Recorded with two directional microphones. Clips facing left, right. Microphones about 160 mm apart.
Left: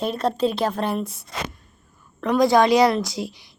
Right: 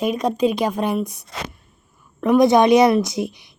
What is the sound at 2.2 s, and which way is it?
A woman's voice, 20° right (ahead or behind).